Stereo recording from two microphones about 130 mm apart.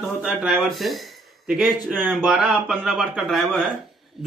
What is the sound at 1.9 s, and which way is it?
Speech, centre (ahead or behind).